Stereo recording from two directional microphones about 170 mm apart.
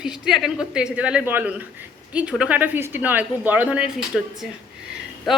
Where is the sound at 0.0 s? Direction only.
5° right (ahead or behind).